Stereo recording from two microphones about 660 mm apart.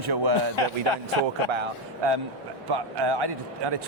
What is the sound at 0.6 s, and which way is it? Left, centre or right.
Speech, left.